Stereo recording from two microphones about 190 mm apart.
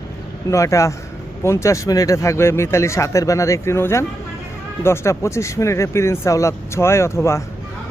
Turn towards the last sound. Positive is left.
turn(degrees=15)  # may be behind; listen again after turning